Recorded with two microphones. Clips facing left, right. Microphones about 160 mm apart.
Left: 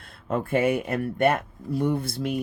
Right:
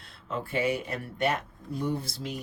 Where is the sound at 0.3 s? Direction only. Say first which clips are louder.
Left 6 dB; 55° left (ahead or behind).